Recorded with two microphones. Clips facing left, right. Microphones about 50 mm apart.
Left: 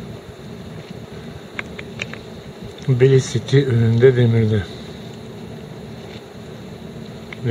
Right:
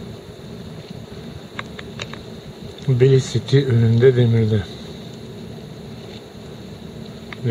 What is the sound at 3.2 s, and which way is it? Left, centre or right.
Speech, centre.